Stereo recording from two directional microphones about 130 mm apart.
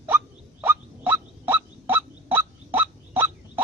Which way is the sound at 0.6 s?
15° right (ahead or behind).